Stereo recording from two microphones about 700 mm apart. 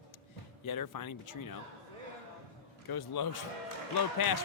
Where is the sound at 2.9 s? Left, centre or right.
Left.